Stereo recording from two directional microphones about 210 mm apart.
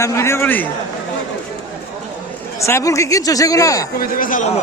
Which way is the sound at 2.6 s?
15° left (ahead or behind).